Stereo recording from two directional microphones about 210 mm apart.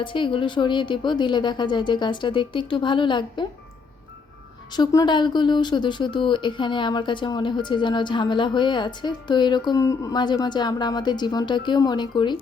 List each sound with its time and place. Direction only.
0.0 s speech: 25° left (ahead or behind)
4.8 s speech: 20° left (ahead or behind)